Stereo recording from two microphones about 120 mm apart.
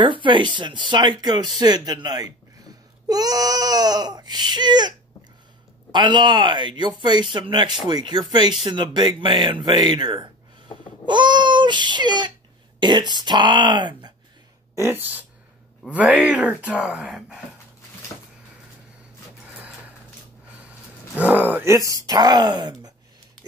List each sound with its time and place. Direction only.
0.0 s speech: 45° right (ahead or behind)
2.6 s a sound: 30° right (ahead or behind)
5.9 s speech: 40° right (ahead or behind)
14.8 s speech: 15° right (ahead or behind)
21.2 s speech: 15° right (ahead or behind)
21.7 s speech: 25° right (ahead or behind)